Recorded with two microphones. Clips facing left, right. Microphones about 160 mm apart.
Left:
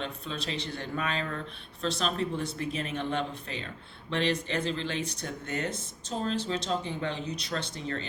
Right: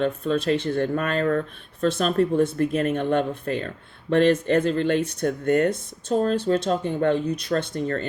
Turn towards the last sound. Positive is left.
turn(degrees=-50)  # may be behind; listen again after turning